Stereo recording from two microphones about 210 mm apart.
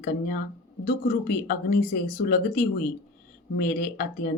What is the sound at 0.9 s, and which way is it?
Speech, 45° left (ahead or behind).